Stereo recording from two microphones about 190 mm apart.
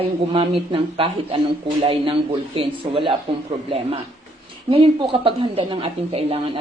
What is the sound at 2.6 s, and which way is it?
Speech, 25° right (ahead or behind).